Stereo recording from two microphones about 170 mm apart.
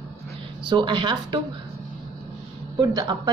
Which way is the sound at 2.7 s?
25° right (ahead or behind).